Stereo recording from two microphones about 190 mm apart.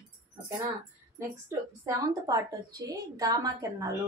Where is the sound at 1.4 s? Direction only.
15° right (ahead or behind).